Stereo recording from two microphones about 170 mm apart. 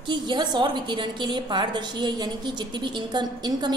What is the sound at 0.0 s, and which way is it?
A woman's voice, 25° right (ahead or behind).